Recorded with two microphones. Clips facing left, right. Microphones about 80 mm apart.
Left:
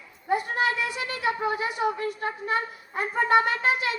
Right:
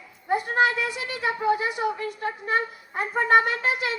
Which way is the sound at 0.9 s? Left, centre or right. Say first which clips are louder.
Even; left.